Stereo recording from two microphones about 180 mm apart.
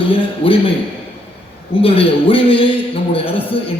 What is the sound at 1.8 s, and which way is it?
A man's voice, 30° left (ahead or behind).